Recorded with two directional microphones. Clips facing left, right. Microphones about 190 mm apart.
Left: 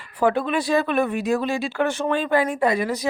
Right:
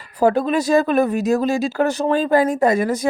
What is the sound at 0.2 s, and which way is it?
Speech, 40° right (ahead or behind).